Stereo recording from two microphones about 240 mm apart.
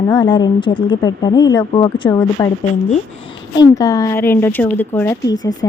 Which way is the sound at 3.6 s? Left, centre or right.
Centre.